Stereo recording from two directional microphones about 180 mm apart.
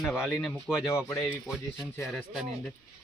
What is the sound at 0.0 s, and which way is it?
Speech, 10° left (ahead or behind).